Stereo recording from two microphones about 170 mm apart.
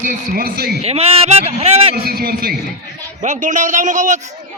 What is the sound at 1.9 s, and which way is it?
Speech, 60° right (ahead or behind).